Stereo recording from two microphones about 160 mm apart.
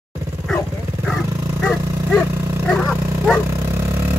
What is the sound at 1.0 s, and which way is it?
Dog, centre (ahead or behind).